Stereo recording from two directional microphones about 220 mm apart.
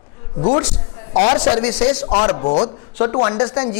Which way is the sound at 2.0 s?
25° left (ahead or behind).